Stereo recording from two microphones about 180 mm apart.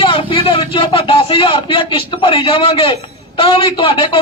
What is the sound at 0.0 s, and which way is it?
A man's voice, 30° left (ahead or behind).